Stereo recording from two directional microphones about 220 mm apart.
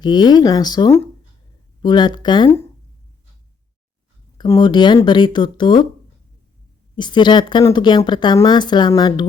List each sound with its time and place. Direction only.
0.0 s speech: 20° left (ahead or behind)
4.4 s speech: 20° left (ahead or behind)
6.9 s speech: 20° left (ahead or behind)